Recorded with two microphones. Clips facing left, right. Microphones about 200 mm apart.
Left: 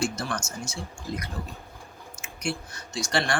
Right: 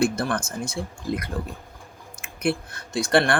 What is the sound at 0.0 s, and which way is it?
Speech, 55° right (ahead or behind).